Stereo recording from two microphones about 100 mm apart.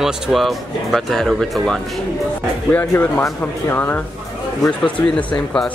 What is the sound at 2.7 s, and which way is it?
Speech, 20° left (ahead or behind).